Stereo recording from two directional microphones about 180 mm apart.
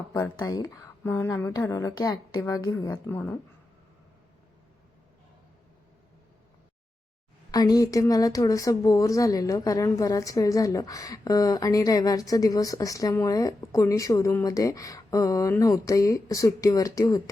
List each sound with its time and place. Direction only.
0.1 s a woman's voice: 20° left (ahead or behind)
7.5 s speech: 20° left (ahead or behind)